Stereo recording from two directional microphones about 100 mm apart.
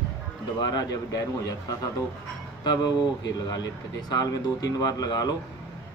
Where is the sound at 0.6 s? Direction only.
40° left (ahead or behind).